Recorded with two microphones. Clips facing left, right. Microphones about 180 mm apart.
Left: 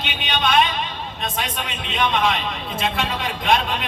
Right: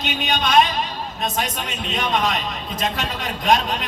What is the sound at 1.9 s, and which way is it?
A man's voice, 40° right (ahead or behind).